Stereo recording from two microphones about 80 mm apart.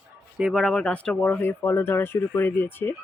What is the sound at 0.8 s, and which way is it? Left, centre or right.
Speech, centre.